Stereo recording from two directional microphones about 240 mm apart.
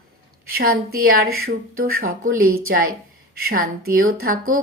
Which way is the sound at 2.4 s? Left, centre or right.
Right.